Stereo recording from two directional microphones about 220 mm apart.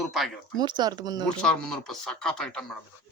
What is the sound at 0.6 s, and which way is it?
Speech, 20° right (ahead or behind).